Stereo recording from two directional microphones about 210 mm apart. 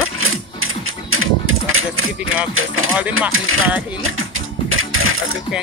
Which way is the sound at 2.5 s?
75° right (ahead or behind).